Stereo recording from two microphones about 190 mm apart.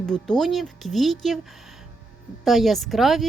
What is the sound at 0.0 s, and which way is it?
A woman's voice, 5° left (ahead or behind).